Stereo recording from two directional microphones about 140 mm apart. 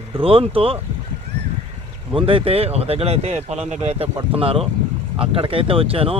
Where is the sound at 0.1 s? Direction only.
40° right (ahead or behind).